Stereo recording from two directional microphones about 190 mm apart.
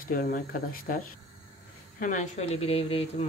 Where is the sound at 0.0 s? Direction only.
45° left (ahead or behind).